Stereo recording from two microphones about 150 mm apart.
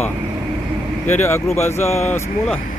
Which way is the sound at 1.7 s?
45° left (ahead or behind).